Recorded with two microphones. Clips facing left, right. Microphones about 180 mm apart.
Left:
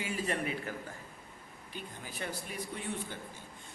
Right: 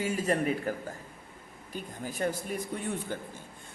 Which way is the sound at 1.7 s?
45° right (ahead or behind).